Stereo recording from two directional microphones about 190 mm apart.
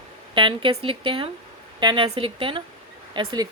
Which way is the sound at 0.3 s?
25° right (ahead or behind).